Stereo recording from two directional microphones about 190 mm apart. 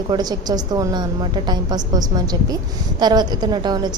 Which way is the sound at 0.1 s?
20° right (ahead or behind).